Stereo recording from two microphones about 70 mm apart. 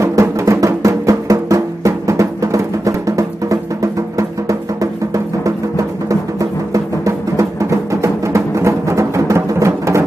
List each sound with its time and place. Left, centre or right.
0.0 s music: right
6.7 s music: right